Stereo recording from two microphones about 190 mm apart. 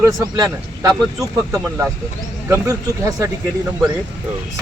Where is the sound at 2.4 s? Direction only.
15° right (ahead or behind).